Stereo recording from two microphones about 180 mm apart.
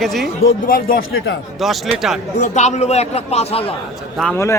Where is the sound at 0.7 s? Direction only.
50° left (ahead or behind).